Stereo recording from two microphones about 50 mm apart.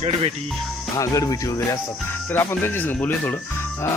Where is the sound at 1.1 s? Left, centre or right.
Left.